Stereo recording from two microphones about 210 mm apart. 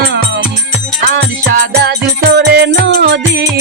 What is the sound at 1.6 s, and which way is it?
Music, 50° right (ahead or behind).